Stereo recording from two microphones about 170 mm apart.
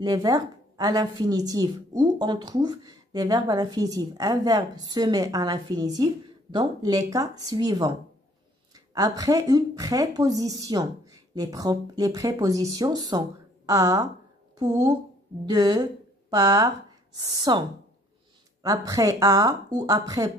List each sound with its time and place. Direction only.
0.0 s a woman's voice: 20° right (ahead or behind)
8.9 s a woman's voice: 20° right (ahead or behind)